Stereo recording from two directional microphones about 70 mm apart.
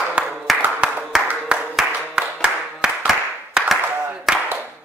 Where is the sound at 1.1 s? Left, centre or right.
Centre.